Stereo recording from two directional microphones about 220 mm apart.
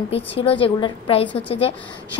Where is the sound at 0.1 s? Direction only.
25° left (ahead or behind).